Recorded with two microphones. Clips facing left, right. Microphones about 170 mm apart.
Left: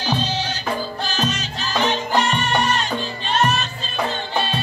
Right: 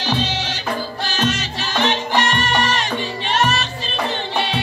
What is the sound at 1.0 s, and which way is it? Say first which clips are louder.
Music: right 2 dB; 80° right.